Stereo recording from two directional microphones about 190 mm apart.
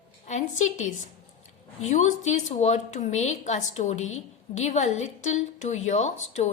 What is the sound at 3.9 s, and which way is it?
Speech, 90° left.